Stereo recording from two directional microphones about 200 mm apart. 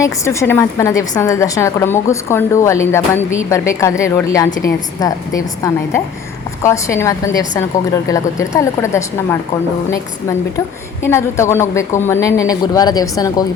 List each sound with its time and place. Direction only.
0.0 s a woman's voice: 15° left (ahead or behind)
11.0 s a woman's voice: 15° left (ahead or behind)